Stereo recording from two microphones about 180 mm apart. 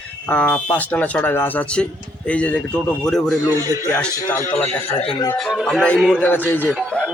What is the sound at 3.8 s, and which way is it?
Speech, 10° left (ahead or behind).